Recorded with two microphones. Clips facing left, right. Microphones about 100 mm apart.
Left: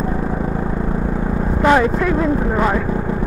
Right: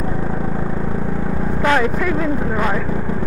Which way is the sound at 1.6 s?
15° left (ahead or behind).